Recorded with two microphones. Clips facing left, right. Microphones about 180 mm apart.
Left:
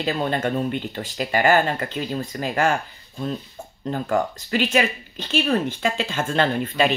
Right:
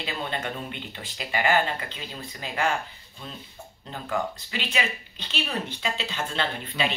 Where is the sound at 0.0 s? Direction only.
45° left (ahead or behind).